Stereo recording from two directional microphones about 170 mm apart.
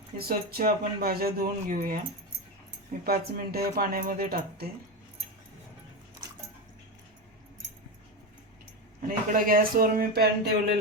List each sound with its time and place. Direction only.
0.2 s speech: 60° right (ahead or behind)
3.1 s speech: 65° right (ahead or behind)
9.0 s speech: 55° right (ahead or behind)